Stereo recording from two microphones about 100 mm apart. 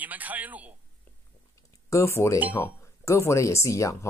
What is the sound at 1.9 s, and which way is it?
Speech, 30° left (ahead or behind).